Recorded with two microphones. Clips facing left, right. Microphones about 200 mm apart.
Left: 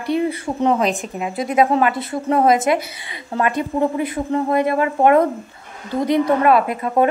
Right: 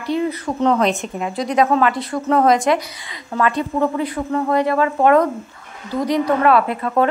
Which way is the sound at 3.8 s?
20° left (ahead or behind).